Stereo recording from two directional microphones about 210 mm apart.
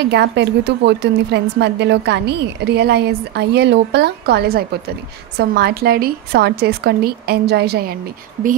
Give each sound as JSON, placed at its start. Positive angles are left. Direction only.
{"t": 0.1, "sound": "a woman's voice", "side_deg": -50}